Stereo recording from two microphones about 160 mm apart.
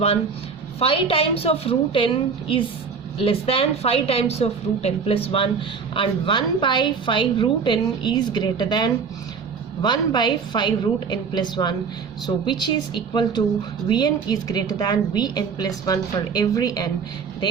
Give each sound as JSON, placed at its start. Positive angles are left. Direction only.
{"t": 0.8, "sound": "a woman's voice", "side_deg": 35}